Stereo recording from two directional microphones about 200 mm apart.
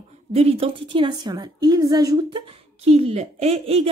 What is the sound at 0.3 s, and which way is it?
A woman's voice, 30° right (ahead or behind).